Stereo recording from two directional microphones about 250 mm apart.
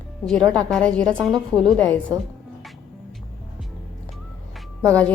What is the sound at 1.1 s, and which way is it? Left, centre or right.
Speech, centre.